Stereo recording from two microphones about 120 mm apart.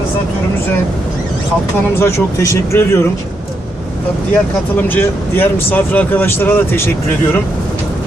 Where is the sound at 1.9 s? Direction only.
25° left (ahead or behind).